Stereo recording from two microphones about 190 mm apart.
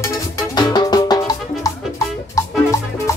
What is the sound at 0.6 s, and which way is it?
Music, 20° left (ahead or behind).